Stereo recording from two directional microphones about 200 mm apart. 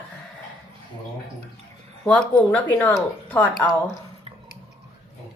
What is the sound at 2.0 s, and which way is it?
A woman's voice, 10° left (ahead or behind).